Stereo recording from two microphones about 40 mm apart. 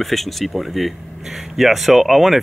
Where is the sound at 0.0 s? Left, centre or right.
Centre.